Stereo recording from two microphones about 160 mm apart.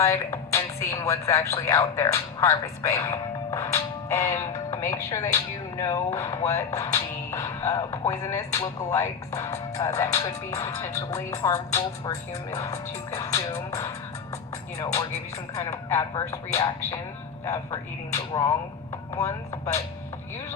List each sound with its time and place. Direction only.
0.0 s speech: 15° left (ahead or behind)
15.5 s speech: 20° left (ahead or behind)